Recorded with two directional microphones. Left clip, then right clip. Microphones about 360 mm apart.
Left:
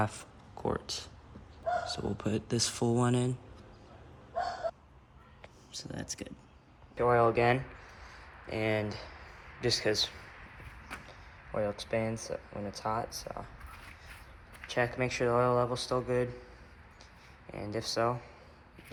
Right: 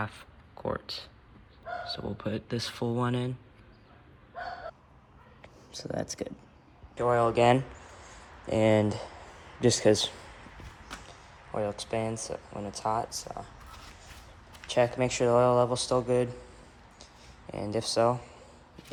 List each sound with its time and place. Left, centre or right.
0.0 s speech: centre
5.7 s speech: centre
8.4 s speech: right
11.5 s speech: centre
12.9 s speech: centre
14.7 s speech: centre
17.0 s a sound: centre